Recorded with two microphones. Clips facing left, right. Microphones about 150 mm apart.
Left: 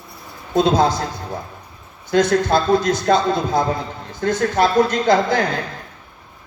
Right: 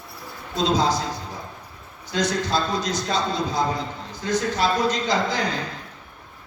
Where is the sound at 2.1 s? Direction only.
55° left (ahead or behind).